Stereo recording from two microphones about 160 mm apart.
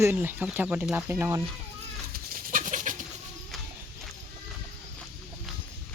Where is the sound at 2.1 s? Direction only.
60° right (ahead or behind).